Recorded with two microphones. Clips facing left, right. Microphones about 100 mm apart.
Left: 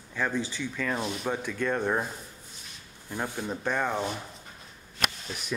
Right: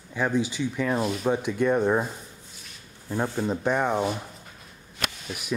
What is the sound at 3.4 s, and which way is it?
Speech, 15° right (ahead or behind).